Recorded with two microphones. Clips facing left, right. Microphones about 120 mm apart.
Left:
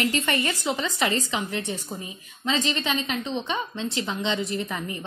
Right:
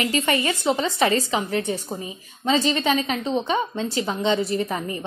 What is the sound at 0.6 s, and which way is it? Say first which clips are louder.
A woman's voice: right 5 dB; 35° right (ahead or behind).